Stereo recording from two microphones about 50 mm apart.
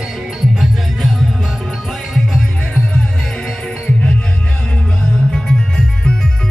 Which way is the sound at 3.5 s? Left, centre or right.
Centre.